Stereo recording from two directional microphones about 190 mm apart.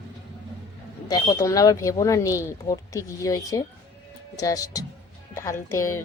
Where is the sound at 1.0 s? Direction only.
20° left (ahead or behind).